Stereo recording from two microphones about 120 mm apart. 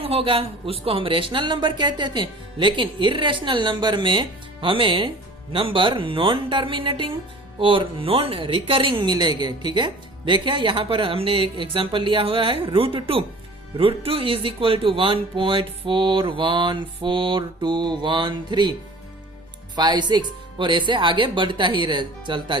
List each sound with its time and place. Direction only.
0.0 s speech: 50° right (ahead or behind)
19.7 s speech: 35° right (ahead or behind)